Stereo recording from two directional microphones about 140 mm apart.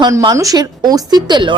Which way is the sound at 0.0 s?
30° right (ahead or behind).